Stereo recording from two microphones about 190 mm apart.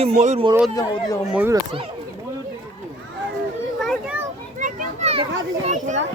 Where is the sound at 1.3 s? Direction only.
10° right (ahead or behind).